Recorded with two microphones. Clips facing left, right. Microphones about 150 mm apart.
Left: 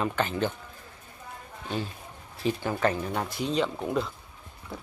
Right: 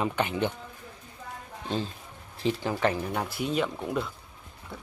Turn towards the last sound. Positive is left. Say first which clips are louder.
# left 2 dB
turn(degrees=0)  # may be behind; listen again after turning